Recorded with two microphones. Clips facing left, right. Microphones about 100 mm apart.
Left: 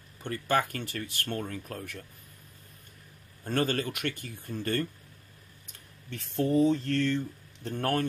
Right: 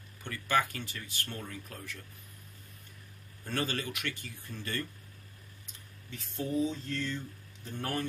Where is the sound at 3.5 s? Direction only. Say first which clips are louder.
Left 6 dB; 45° left (ahead or behind).